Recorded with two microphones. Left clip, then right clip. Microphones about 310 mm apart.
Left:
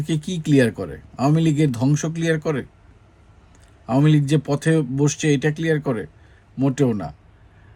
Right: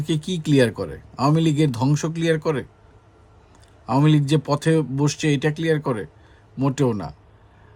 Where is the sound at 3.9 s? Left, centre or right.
Centre.